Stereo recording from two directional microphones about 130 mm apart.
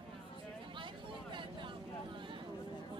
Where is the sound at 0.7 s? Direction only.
40° right (ahead or behind).